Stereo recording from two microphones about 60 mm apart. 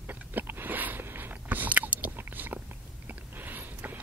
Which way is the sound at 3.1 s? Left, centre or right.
Right.